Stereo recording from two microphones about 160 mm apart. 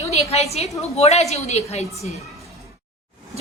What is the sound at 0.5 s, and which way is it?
A woman's voice, 40° left (ahead or behind).